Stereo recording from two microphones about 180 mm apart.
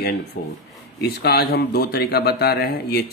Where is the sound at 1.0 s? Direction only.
65° left (ahead or behind).